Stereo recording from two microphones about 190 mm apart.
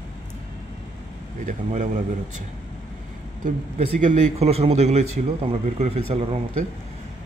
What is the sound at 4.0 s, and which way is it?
Speech, 40° right (ahead or behind).